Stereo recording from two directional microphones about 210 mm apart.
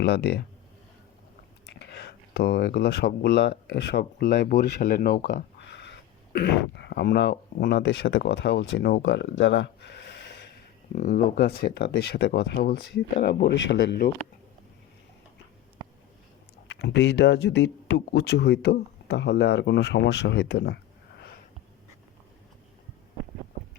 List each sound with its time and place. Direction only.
0.0 s speech: 50° left (ahead or behind)
1.6 s speech: 55° left (ahead or behind)
10.9 s speech: 40° left (ahead or behind)
16.6 s speech: 55° left (ahead or behind)